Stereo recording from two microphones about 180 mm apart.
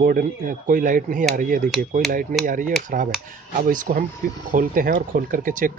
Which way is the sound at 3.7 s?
45° right (ahead or behind).